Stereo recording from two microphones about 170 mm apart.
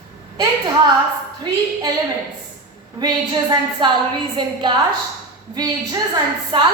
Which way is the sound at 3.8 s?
30° right (ahead or behind).